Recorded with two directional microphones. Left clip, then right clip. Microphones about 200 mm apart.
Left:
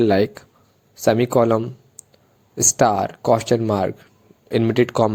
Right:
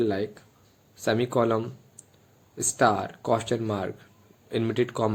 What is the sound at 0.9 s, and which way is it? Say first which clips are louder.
Speech: left 8 dB; 30° left (ahead or behind).